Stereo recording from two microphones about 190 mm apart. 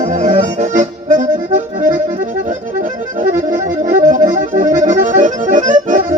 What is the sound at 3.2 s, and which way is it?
Accordion, 45° right (ahead or behind).